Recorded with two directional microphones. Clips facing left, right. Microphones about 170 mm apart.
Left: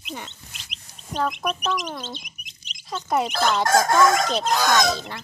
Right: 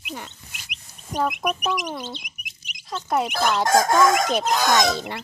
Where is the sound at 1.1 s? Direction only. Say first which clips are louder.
Right 1 dB; 15° right (ahead or behind).